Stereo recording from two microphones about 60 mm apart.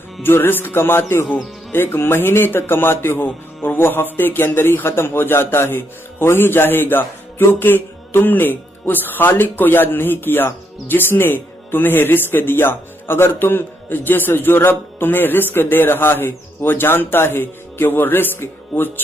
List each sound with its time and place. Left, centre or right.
0.2 s speech: left